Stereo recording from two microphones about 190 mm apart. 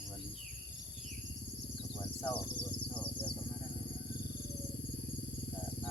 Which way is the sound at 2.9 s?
10° left (ahead or behind).